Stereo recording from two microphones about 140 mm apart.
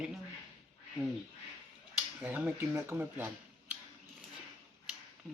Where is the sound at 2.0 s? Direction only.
15° right (ahead or behind).